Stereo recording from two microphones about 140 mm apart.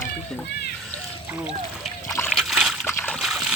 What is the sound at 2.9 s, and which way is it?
Splash, 15° left (ahead or behind).